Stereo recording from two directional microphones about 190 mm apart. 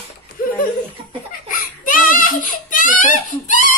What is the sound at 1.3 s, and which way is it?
Baby cry, 45° left (ahead or behind).